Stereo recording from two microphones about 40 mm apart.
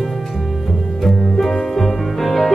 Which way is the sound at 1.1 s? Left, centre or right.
Centre.